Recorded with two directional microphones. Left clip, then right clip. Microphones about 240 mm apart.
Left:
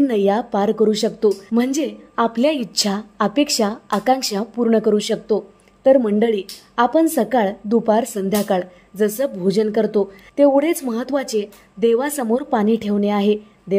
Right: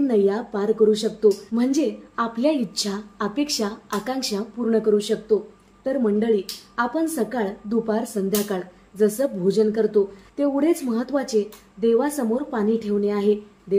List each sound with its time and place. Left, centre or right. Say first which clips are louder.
0.0 s a woman's voice: left 3 dB; left